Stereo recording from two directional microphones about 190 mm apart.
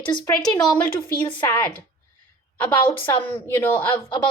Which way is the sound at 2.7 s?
25° left (ahead or behind).